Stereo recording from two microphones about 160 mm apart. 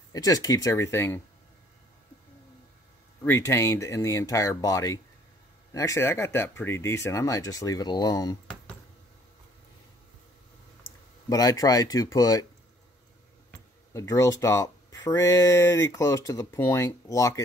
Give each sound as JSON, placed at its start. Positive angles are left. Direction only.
{"t": 0.1, "sound": "speech", "side_deg": 20}
{"t": 3.3, "sound": "speech", "side_deg": 15}
{"t": 11.2, "sound": "speech", "side_deg": 20}
{"t": 13.9, "sound": "speech", "side_deg": 20}